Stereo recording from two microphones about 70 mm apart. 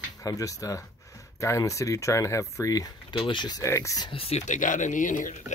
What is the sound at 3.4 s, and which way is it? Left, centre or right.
Speech, left.